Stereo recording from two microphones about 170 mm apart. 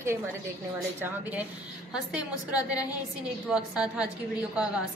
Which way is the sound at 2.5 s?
20° left (ahead or behind).